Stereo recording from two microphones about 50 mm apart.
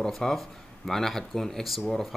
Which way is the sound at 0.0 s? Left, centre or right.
Centre.